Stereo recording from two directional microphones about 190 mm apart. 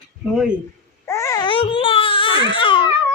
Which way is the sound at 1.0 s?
15° left (ahead or behind).